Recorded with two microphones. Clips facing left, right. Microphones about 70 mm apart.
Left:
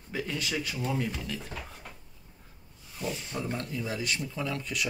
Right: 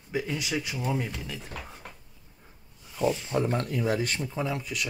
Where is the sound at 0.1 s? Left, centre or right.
Centre.